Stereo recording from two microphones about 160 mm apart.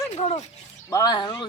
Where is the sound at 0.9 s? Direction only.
25° left (ahead or behind).